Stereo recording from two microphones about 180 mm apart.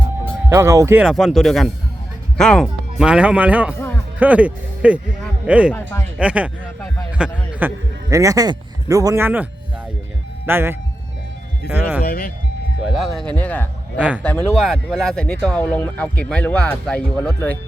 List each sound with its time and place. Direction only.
0.5 s speech: 15° right (ahead or behind); by 3.1 s 5° left (ahead or behind)
3.1 s a man's voice: 5° right (ahead or behind)
12.0 s speech: 55° left (ahead or behind)
12.9 s speech: centre (ahead or behind)